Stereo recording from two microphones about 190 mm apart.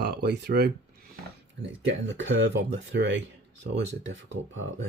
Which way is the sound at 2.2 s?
75° right (ahead or behind).